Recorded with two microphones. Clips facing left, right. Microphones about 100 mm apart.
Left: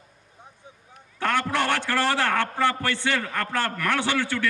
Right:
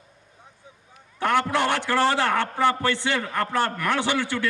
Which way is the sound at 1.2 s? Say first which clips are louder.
Right 2 dB; 15° right (ahead or behind).